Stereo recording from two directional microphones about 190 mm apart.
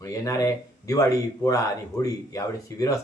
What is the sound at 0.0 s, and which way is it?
Speech, 15° left (ahead or behind).